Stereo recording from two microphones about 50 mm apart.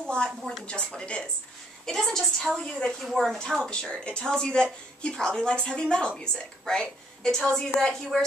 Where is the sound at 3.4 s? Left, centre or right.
Centre.